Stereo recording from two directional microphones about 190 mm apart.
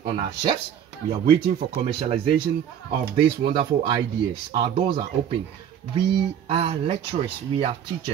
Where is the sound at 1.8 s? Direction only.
25° right (ahead or behind).